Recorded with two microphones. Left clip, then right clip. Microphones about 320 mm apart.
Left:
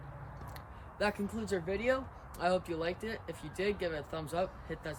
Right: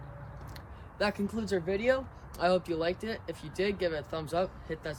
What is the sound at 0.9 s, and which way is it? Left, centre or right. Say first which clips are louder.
Speech: right 3 dB; centre.